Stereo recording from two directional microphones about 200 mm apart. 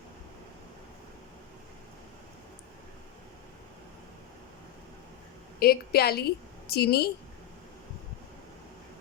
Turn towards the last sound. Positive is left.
turn(degrees=55)  # may be behind; listen again after turning